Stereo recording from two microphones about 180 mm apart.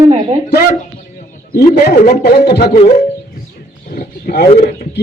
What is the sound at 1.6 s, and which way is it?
Speech, 60° left (ahead or behind).